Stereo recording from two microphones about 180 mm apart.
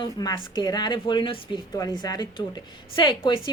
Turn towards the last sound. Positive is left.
turn(degrees=25)  # may be behind; listen again after turning